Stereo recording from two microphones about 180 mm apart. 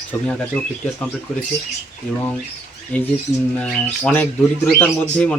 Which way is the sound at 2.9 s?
10° left (ahead or behind).